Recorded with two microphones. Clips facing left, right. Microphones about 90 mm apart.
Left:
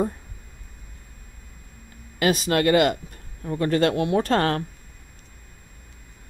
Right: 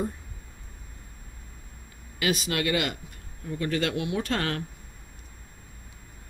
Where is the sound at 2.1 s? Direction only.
40° left (ahead or behind).